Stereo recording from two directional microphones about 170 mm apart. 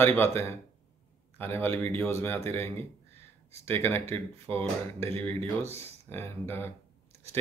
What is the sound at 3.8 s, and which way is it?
Speech, 15° left (ahead or behind).